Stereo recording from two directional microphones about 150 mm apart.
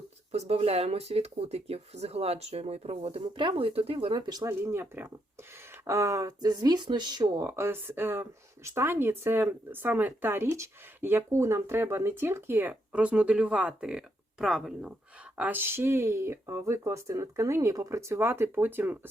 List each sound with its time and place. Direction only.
0.3 s speech: 45° right (ahead or behind); by 18.9 s 15° right (ahead or behind)